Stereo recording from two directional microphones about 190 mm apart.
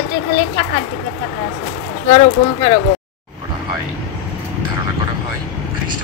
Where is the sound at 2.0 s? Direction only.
25° left (ahead or behind).